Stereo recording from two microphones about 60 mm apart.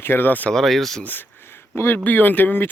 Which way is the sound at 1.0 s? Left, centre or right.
Left.